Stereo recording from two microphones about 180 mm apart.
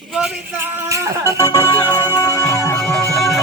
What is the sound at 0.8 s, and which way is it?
Music, 15° right (ahead or behind).